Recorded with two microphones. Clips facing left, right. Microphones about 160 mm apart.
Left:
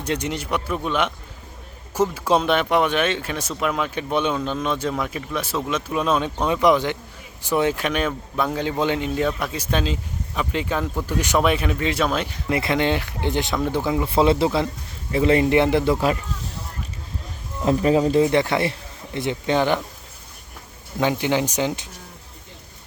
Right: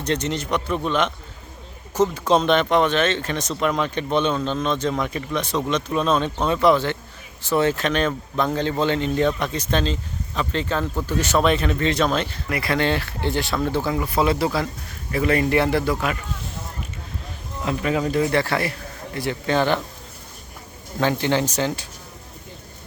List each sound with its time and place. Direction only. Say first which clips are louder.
0.0 s speech: right 2 dB; 10° left (ahead or behind)
12.5 s speech: left 2 dB; 25° left (ahead or behind)
17.7 s speech: left 5 dB; 30° left (ahead or behind); by 19.8 s 15° left (ahead or behind)
21.0 s speech: even; 15° left (ahead or behind)